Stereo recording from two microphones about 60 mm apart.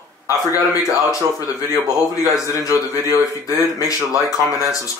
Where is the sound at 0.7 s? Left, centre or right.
Left.